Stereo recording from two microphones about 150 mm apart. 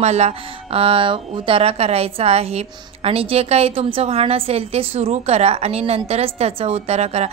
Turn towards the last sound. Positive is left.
turn(degrees=-45)  # may be behind; listen again after turning